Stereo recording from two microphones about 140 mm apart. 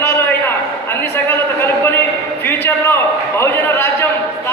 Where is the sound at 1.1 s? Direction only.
15° left (ahead or behind).